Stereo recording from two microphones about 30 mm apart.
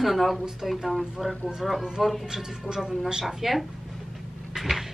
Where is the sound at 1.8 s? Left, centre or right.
Right.